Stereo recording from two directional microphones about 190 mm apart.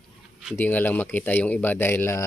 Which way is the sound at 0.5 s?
10° left (ahead or behind).